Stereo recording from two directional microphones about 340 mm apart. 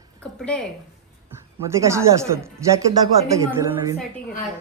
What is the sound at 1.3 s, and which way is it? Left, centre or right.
A woman's voice, centre.